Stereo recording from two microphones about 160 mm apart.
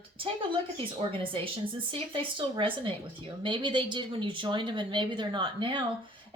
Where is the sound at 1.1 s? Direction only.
35° right (ahead or behind).